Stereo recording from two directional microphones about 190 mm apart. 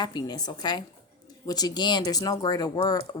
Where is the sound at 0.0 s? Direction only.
20° left (ahead or behind).